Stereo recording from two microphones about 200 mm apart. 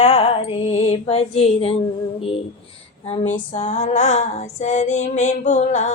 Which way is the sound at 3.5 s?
35° left (ahead or behind).